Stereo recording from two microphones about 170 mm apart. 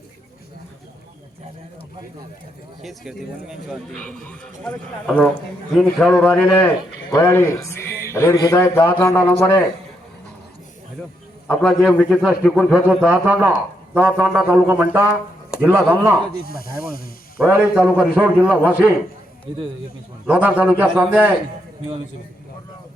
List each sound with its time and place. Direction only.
2.8 s speech: centre (ahead or behind)
11.4 s a man's voice: centre (ahead or behind)
16.3 s speech: 60° left (ahead or behind)
17.4 s a man's voice: 10° right (ahead or behind)
20.2 s a man's voice: 10° right (ahead or behind)